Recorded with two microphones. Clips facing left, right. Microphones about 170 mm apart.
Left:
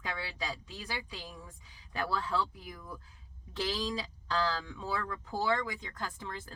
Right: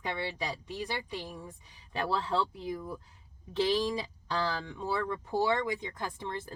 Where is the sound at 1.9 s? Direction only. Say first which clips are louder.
Right 3 dB; 25° right (ahead or behind).